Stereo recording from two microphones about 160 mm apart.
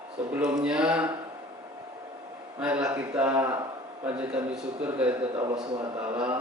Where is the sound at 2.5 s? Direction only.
5° right (ahead or behind).